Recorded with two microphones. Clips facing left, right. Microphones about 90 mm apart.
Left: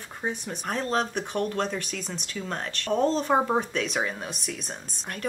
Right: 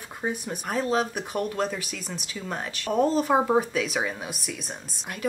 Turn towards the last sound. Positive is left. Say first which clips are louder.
# right 1 dB
turn(degrees=-5)  # may be behind; listen again after turning